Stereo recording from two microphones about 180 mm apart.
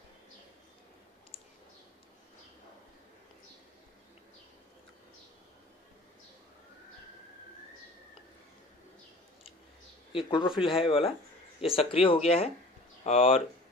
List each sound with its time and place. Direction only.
10.1 s speech: 30° left (ahead or behind)